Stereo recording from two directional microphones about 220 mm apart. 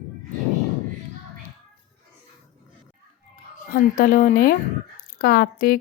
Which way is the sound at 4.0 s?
35° left (ahead or behind).